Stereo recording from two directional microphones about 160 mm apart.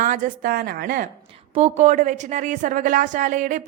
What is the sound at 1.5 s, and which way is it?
A woman's voice, 45° right (ahead or behind).